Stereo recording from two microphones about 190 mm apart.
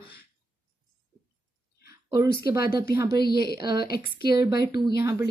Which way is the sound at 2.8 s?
15° right (ahead or behind).